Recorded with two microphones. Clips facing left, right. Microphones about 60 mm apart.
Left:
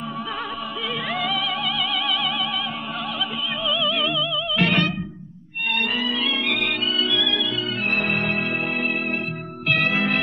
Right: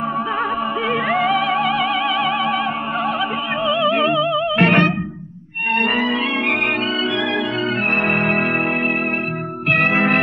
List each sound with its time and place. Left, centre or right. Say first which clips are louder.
0.8 s music: right 7 dB; right
3.6 s music: right 7 dB; right
9.7 s music: right 5 dB; right